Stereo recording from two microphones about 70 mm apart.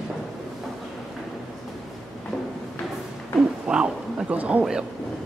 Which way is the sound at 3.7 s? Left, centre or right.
Centre.